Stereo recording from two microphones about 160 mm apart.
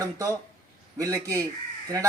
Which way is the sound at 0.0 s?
20° right (ahead or behind).